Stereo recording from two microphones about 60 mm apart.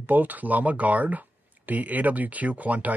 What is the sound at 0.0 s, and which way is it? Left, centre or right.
Speech, right.